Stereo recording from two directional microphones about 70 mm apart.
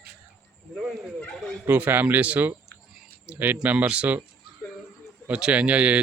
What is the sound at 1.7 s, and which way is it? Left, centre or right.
Speech, right.